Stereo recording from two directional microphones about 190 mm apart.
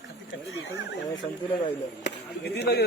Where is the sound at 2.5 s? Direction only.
60° left (ahead or behind).